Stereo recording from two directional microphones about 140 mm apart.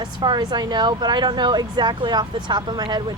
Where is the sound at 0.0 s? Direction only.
30° right (ahead or behind).